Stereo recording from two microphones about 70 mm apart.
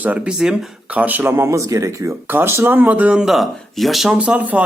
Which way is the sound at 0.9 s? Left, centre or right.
Right.